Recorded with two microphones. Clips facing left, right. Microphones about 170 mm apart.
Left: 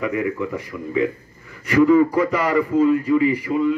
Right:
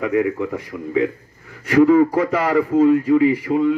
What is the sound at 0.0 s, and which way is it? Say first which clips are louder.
A man's voice: right 3 dB; 70° right (ahead or behind).